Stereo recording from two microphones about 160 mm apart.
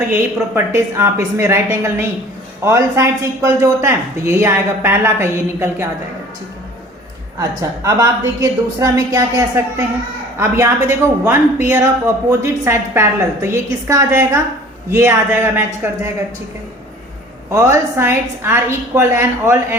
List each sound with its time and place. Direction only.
0.0 s speech: 15° right (ahead or behind)
7.9 s a woman's voice: 25° right (ahead or behind)
17.5 s speech: 20° right (ahead or behind)